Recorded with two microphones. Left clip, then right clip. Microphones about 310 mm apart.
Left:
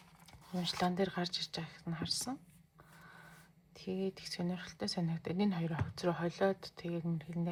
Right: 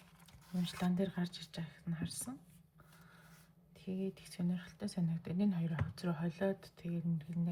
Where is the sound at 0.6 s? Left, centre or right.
Centre.